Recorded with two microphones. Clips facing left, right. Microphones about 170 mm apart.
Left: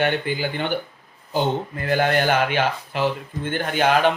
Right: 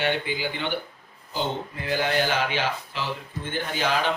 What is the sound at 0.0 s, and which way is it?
A man's voice, 50° left (ahead or behind).